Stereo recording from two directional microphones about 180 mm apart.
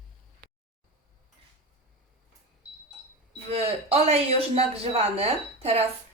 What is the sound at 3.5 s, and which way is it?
Speech, 35° right (ahead or behind).